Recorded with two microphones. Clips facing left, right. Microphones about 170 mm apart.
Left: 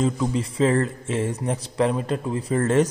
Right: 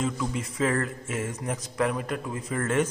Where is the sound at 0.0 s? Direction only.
35° left (ahead or behind).